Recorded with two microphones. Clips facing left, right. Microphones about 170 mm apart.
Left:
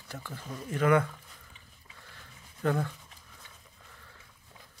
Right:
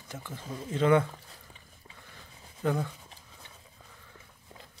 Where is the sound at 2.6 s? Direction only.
15° right (ahead or behind).